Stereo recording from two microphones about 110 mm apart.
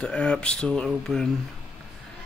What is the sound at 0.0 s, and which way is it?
Speech, 10° left (ahead or behind).